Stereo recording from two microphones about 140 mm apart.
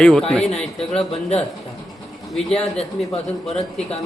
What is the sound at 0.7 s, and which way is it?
Speech, 45° left (ahead or behind).